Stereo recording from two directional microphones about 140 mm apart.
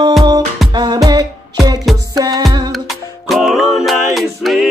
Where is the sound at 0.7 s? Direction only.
25° right (ahead or behind).